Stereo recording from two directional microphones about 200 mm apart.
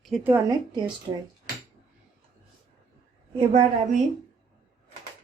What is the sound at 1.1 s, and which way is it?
Speech, 25° right (ahead or behind).